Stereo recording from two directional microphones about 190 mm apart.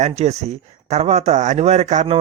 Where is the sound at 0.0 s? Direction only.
35° right (ahead or behind).